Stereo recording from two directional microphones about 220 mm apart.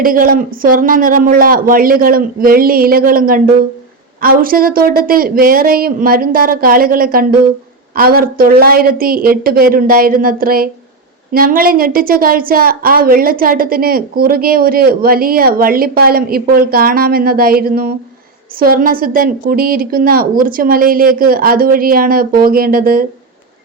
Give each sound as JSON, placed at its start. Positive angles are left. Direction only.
{"t": 0.0, "sound": "a woman's voice", "side_deg": -40}